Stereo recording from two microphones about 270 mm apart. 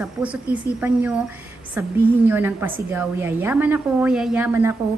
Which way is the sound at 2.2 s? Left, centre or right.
Centre.